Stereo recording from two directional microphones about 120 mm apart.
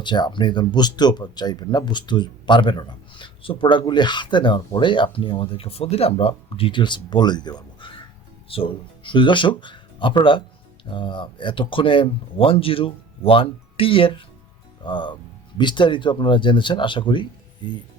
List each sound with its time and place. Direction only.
0.0 s speech: 40° left (ahead or behind)